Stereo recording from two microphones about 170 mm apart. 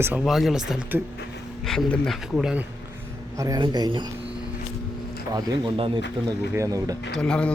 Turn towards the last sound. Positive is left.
turn(degrees=5)  # may be behind; listen again after turning